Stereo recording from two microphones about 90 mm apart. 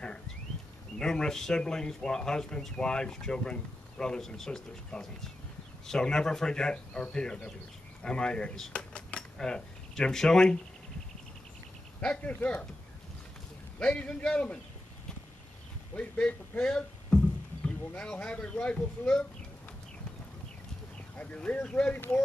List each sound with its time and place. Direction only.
0.9 s speech: 5° left (ahead or behind)
12.0 s speech: 15° left (ahead or behind)
13.7 s speech: 15° left (ahead or behind)
16.0 s speech: 15° left (ahead or behind)
21.2 s speech: 15° left (ahead or behind)
21.9 s speech: 25° left (ahead or behind)